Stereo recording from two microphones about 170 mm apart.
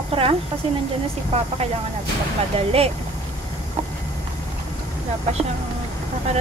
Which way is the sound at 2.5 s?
35° right (ahead or behind).